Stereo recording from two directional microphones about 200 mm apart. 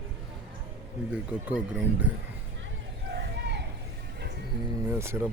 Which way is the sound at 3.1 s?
60° right (ahead or behind).